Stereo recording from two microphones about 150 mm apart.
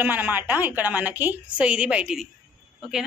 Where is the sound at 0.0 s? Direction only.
10° right (ahead or behind).